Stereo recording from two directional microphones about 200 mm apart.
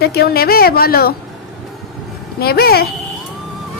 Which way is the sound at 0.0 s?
50° left (ahead or behind).